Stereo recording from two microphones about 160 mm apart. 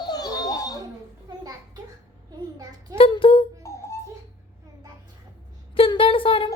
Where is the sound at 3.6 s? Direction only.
15° left (ahead or behind).